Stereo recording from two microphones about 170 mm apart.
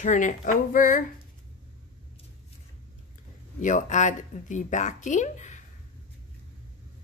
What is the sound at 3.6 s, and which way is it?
Speech, 45° left (ahead or behind).